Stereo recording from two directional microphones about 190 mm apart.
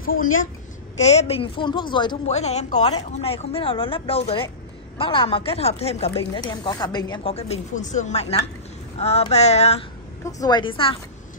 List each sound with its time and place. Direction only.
0.0 s a woman's voice: 50° left (ahead or behind)
1.0 s a woman's voice: 35° left (ahead or behind)
2.2 s speech: 35° left (ahead or behind)
10.2 s a woman's voice: 20° left (ahead or behind)